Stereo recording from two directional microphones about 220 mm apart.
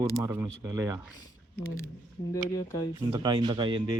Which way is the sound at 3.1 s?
20° right (ahead or behind).